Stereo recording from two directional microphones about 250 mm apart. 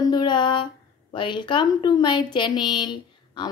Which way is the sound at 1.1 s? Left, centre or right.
Centre.